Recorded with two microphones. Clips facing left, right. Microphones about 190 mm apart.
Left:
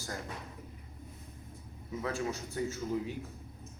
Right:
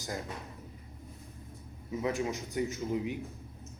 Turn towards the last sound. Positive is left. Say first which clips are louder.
# right 2 dB
turn(degrees=-15)  # may be behind; listen again after turning